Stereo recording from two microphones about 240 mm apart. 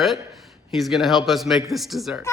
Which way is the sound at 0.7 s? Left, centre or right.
Centre.